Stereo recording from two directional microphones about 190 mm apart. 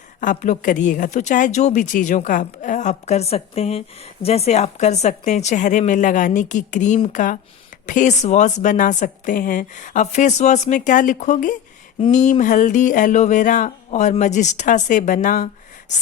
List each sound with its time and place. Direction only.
0.2 s a woman's voice: 40° left (ahead or behind)